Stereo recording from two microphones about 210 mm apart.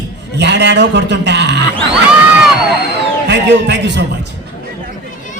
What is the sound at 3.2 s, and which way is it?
Speech, 55° right (ahead or behind).